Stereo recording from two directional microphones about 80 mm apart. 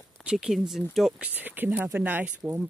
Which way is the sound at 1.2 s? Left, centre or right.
Right.